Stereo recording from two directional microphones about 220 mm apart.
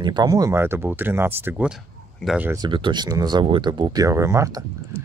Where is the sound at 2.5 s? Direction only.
20° right (ahead or behind).